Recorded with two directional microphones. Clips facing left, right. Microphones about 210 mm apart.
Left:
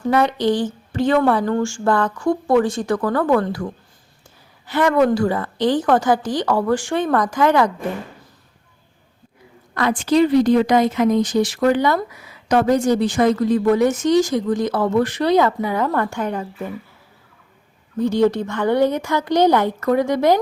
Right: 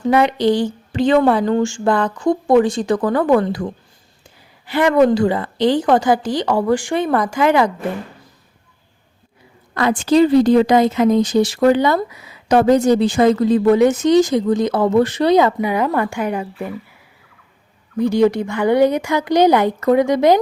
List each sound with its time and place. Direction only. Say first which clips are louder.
0.0 s speech: right 3 dB; 15° right (ahead or behind)
9.7 s speech: right 3 dB; 30° right (ahead or behind); by 16.7 s 10° right (ahead or behind)
17.9 s speech: right 2 dB; 10° right (ahead or behind)